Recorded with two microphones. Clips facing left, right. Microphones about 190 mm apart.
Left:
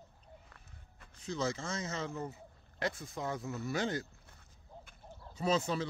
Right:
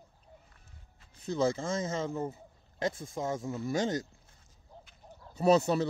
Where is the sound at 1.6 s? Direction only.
45° right (ahead or behind).